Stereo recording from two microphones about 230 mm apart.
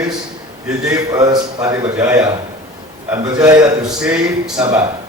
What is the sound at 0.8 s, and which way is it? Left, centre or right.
A man's voice, centre.